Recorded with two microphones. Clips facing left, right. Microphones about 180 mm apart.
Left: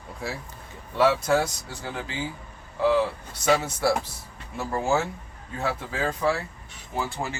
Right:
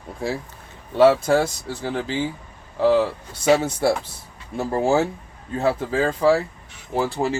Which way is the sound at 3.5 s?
30° right (ahead or behind).